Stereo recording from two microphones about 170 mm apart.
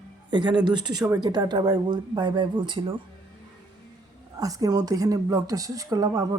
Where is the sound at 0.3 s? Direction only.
25° right (ahead or behind).